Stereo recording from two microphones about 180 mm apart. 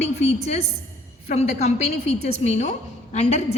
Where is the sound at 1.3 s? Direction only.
35° left (ahead or behind).